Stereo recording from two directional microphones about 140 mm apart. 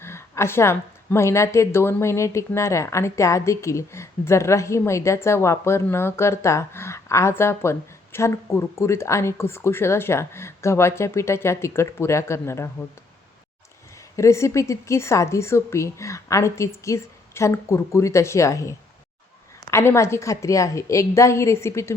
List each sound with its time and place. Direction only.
0.0 s speech: 20° left (ahead or behind)
14.2 s speech: 20° left (ahead or behind)